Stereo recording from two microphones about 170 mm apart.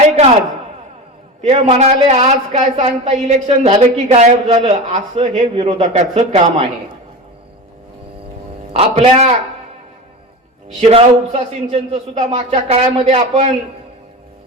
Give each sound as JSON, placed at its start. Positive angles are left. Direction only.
{"t": 1.4, "sound": "a woman's voice", "side_deg": -40}
{"t": 8.7, "sound": "a woman's voice", "side_deg": -35}
{"t": 10.8, "sound": "a woman's voice", "side_deg": -35}